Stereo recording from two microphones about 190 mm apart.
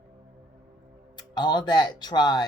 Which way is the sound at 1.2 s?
20° left (ahead or behind).